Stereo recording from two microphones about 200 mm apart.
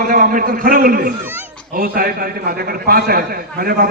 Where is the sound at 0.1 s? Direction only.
45° right (ahead or behind).